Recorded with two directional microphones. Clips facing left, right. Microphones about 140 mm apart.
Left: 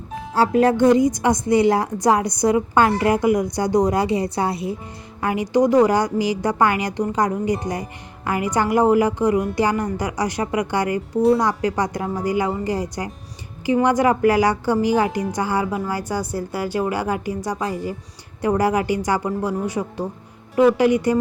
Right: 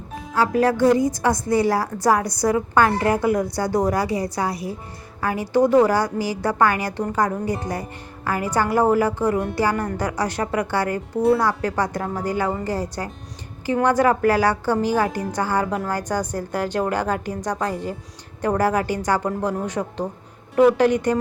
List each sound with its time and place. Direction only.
0.3 s a woman's voice: 25° left (ahead or behind); by 21.2 s 10° left (ahead or behind)